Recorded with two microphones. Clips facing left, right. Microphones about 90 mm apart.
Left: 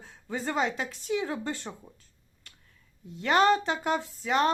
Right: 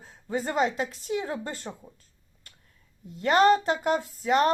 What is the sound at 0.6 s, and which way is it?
Speech, 40° right (ahead or behind).